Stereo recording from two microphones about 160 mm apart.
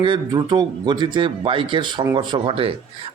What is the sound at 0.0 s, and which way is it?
A man's voice, 30° right (ahead or behind).